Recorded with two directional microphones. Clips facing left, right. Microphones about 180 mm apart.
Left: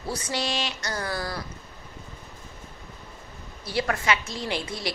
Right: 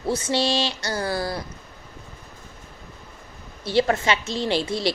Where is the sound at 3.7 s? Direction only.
25° right (ahead or behind).